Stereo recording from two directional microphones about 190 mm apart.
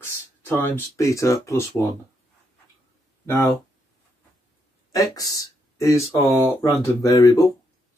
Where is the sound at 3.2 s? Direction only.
15° left (ahead or behind).